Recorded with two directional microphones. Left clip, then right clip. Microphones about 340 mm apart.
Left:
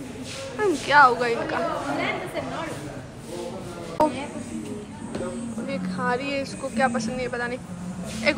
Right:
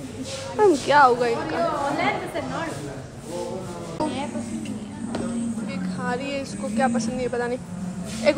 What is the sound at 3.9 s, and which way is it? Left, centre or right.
Music, centre.